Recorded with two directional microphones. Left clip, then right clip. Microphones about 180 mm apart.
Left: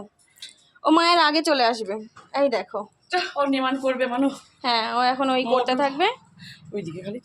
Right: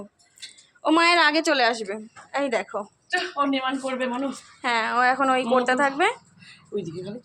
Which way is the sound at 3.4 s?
55° left (ahead or behind).